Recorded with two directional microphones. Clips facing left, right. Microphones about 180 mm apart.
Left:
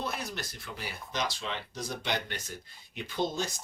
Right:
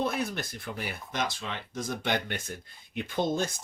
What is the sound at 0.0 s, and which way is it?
Speech, 55° right (ahead or behind).